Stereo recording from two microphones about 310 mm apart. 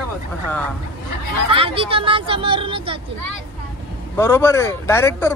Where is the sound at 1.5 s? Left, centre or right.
Centre.